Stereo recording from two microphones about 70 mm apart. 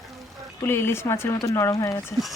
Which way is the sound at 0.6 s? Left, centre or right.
Left.